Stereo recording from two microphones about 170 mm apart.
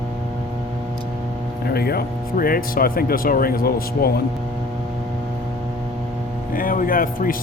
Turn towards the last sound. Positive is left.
turn(degrees=55)  # may be behind; listen again after turning